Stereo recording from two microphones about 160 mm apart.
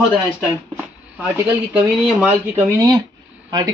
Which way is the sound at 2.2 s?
10° right (ahead or behind).